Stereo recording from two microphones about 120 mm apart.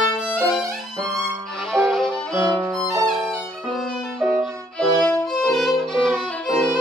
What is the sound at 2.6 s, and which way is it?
Music, 5° left (ahead or behind).